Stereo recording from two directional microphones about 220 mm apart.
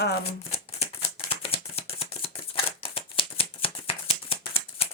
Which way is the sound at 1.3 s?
25° left (ahead or behind).